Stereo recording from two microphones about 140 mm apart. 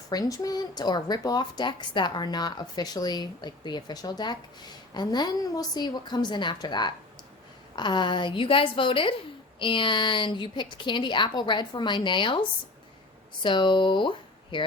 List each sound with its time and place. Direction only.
0.1 s a woman's voice: 25° left (ahead or behind)